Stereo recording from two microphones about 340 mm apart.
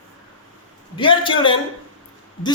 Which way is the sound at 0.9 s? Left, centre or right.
Centre.